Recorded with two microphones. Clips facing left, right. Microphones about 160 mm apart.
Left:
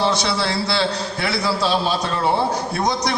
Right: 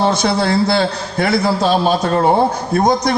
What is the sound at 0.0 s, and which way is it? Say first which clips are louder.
A man's voice: right 5 dB; 50° right (ahead or behind).